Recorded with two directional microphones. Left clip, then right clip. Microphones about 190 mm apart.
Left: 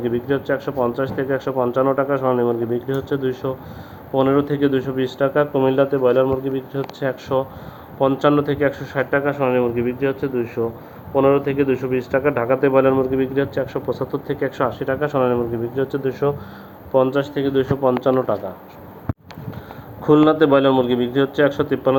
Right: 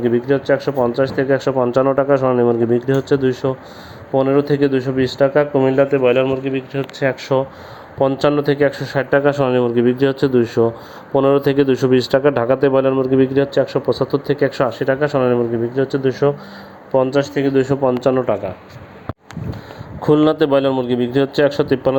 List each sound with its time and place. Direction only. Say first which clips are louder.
0.0 s speech: right 5 dB; 35° right (ahead or behind)
6.0 s a man's voice: right 2 dB; 10° right (ahead or behind)
7.0 s speech: right 4 dB; 30° right (ahead or behind); by 11.9 s 65° right (ahead or behind)
12.1 s speech: right 4 dB; 50° right (ahead or behind); by 16.3 s 30° right (ahead or behind)
18.0 s speech: right 2 dB; 30° right (ahead or behind)
20.0 s speech: even; 40° right (ahead or behind)